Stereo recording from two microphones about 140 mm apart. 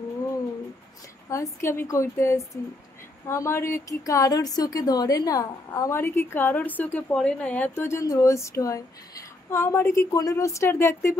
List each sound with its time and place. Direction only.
1.3 s a woman's voice: 20° left (ahead or behind)